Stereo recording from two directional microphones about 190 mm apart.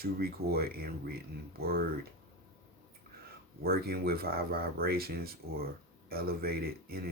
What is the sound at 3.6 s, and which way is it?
Speech, 55° right (ahead or behind).